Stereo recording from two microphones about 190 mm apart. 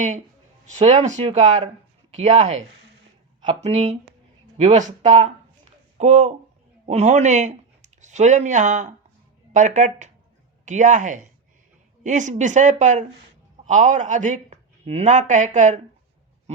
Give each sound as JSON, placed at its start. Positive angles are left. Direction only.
{"t": 0.6, "sound": "speech", "side_deg": -35}